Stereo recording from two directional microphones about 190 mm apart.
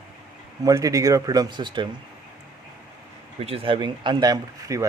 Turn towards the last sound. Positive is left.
turn(degrees=-20)  # may be behind; listen again after turning